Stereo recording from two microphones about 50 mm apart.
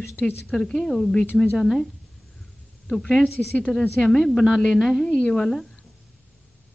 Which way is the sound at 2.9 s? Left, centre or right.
Centre.